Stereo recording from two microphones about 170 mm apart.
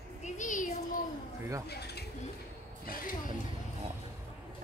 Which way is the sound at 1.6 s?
75° left (ahead or behind).